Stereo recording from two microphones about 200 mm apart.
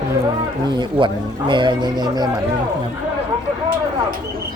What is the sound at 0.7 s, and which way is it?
Speech, 25° right (ahead or behind).